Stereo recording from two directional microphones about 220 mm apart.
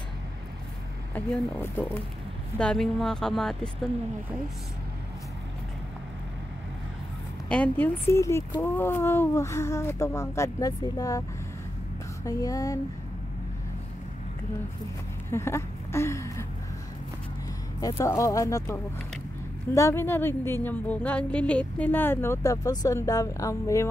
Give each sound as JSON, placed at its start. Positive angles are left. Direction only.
{"t": 1.1, "sound": "speech", "side_deg": 10}
{"t": 7.4, "sound": "speech", "side_deg": 5}
{"t": 12.3, "sound": "speech", "side_deg": 15}
{"t": 15.3, "sound": "a sound", "side_deg": 10}
{"t": 17.7, "sound": "speech", "side_deg": 15}